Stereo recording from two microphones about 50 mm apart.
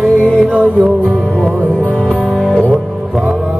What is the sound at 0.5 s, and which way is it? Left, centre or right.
Music, right.